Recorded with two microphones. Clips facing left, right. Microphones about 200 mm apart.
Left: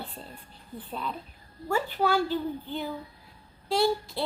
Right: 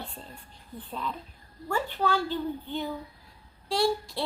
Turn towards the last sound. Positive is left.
turn(degrees=0)  # may be behind; listen again after turning